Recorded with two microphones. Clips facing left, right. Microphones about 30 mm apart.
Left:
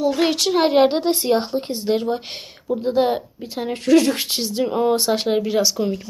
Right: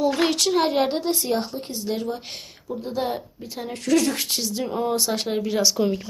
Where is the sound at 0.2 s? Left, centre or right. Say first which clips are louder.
Left 3 dB; centre; by 2.4 s left.